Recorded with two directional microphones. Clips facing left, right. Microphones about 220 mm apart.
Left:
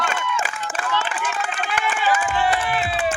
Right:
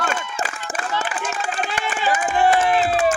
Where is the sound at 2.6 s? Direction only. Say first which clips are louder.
Right 5 dB; 30° right (ahead or behind).